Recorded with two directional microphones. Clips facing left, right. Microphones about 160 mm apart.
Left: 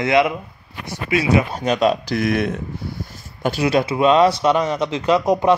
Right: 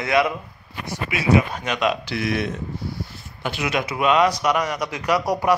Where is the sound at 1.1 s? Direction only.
35° left (ahead or behind); by 2.5 s 50° left (ahead or behind).